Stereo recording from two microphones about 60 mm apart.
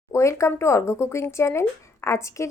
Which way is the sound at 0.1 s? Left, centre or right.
Left.